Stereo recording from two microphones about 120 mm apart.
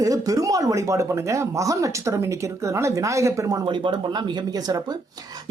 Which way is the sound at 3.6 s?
45° right (ahead or behind).